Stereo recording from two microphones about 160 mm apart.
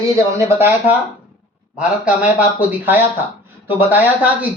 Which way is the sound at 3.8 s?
10° right (ahead or behind).